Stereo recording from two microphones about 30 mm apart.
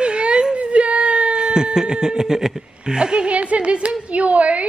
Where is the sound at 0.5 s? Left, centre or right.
Right.